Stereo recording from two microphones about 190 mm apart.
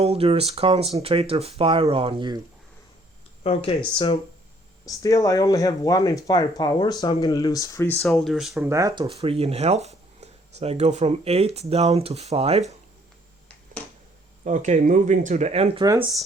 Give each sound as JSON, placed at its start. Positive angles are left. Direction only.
{"t": 0.0, "sound": "speech", "side_deg": -30}
{"t": 3.4, "sound": "speech", "side_deg": 30}
{"t": 8.0, "sound": "speech", "side_deg": 0}
{"t": 8.7, "sound": "speech", "side_deg": -15}
{"t": 9.0, "sound": "speech", "side_deg": -30}
{"t": 14.4, "sound": "speech", "side_deg": -40}
{"t": 15.8, "sound": "speech", "side_deg": -20}